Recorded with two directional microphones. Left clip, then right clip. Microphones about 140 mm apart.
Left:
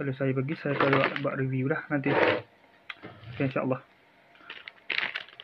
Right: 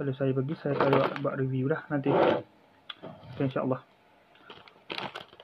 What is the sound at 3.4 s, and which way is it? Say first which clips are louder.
Speech: left 1 dB; 20° left (ahead or behind).